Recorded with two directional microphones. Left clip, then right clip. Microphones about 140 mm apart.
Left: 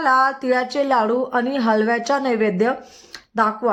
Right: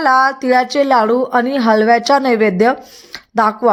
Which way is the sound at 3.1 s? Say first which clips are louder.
Right 5 dB; 35° right (ahead or behind).